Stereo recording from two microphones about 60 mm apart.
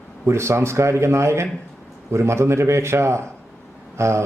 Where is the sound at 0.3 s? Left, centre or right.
Right.